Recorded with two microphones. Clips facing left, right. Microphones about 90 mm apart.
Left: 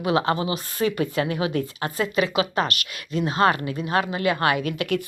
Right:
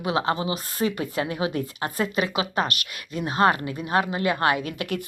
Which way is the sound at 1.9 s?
40° right (ahead or behind).